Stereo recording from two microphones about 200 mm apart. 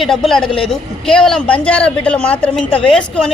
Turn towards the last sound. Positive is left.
turn(degrees=5)  # may be behind; listen again after turning